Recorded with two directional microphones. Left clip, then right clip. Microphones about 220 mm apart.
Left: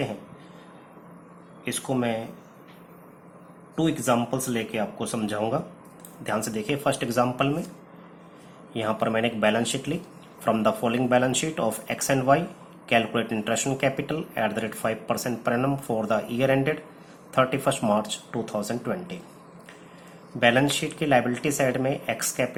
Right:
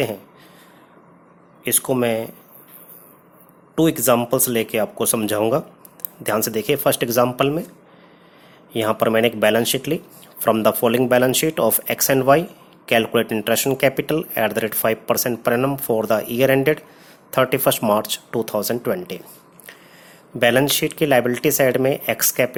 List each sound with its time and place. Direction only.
1.6 s speech: 45° right (ahead or behind)
3.8 s speech: 45° right (ahead or behind)
8.7 s speech: 45° right (ahead or behind)
20.4 s speech: 45° right (ahead or behind)